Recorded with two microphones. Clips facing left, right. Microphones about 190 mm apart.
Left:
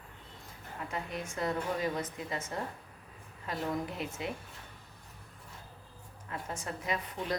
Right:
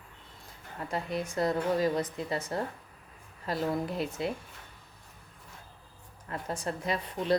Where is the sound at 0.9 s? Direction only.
35° right (ahead or behind).